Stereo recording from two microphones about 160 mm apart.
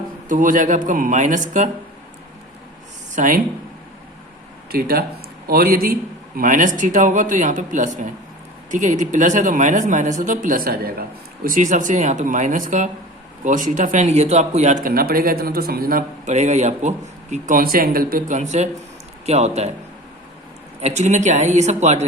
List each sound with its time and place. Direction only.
0.3 s a man's voice: 55° right (ahead or behind)
3.2 s speech: 60° right (ahead or behind)
4.7 s a man's voice: 70° right (ahead or behind)
11.4 s a man's voice: 55° right (ahead or behind)
20.8 s a man's voice: 45° right (ahead or behind)